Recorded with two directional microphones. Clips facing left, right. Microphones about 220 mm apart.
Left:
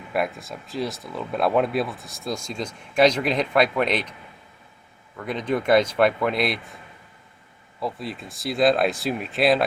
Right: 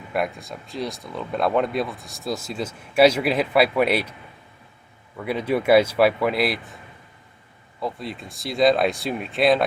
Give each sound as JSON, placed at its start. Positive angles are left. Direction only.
{"t": 0.1, "sound": "speech", "side_deg": 0}
{"t": 5.1, "sound": "a man's voice", "side_deg": -10}
{"t": 7.8, "sound": "speech", "side_deg": 0}